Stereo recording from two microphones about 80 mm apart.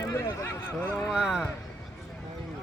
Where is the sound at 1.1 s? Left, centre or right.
Centre.